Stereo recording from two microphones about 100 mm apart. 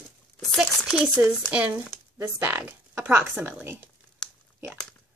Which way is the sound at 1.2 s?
15° right (ahead or behind).